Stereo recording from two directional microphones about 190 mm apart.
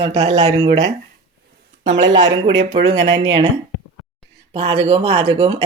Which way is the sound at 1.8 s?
75° right (ahead or behind).